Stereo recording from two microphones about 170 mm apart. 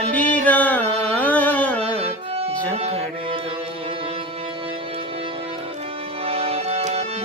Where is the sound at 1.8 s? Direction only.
35° right (ahead or behind).